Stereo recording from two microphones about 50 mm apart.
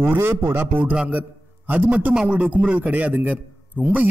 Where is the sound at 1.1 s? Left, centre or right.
Right.